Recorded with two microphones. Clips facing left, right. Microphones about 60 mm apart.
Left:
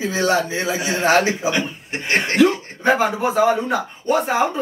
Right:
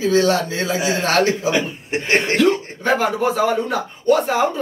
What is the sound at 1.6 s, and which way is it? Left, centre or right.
Speech, right.